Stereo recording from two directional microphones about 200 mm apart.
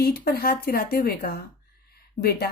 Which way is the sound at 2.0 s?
50° left (ahead or behind).